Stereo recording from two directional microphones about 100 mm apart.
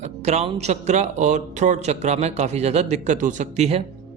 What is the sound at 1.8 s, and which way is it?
Speech, 90° right.